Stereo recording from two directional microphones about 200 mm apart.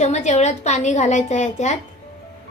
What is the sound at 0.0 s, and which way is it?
A woman's voice, 35° left (ahead or behind).